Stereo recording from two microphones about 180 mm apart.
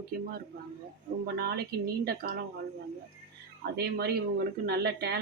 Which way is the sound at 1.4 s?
60° right (ahead or behind).